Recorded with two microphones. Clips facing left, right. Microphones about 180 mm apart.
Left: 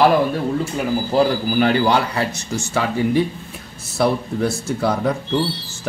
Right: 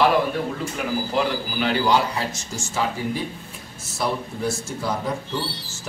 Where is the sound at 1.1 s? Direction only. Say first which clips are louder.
Left 10 dB; 50° left (ahead or behind); by 2.8 s 65° left (ahead or behind).